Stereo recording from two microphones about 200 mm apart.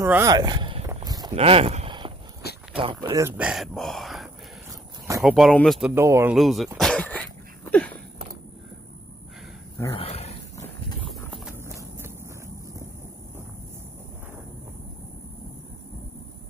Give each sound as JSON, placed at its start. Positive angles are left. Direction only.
{"t": 0.0, "sound": "speech", "side_deg": -15}
{"t": 0.8, "sound": "a sound", "side_deg": -20}
{"t": 1.3, "sound": "a sound", "side_deg": -30}
{"t": 2.7, "sound": "speech", "side_deg": -25}
{"t": 3.3, "sound": "speech", "side_deg": -5}
{"t": 6.3, "sound": "speech", "side_deg": 0}
{"t": 6.8, "sound": "dog", "side_deg": 5}
{"t": 9.9, "sound": "dog", "side_deg": 30}
{"t": 11.1, "sound": "clip-clop", "side_deg": 0}
{"t": 11.5, "sound": "clip-clop", "side_deg": -10}